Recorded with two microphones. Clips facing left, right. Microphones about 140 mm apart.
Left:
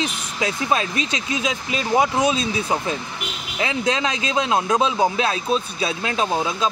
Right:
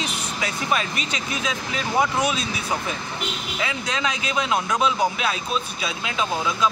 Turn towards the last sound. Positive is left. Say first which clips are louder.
# left 3 dB
turn(degrees=25)  # may be behind; listen again after turning